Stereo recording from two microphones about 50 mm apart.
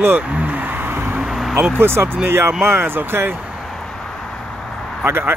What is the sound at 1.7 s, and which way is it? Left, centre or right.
Speech, right.